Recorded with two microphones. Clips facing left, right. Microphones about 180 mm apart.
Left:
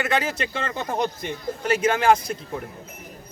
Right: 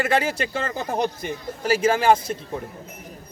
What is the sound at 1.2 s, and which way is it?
Speech, 5° right (ahead or behind).